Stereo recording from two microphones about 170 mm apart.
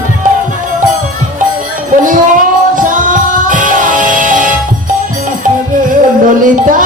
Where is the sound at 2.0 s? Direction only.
50° right (ahead or behind).